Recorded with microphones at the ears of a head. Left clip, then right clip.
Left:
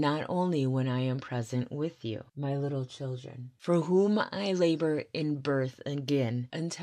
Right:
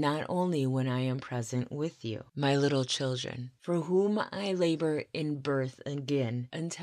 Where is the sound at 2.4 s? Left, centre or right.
Right.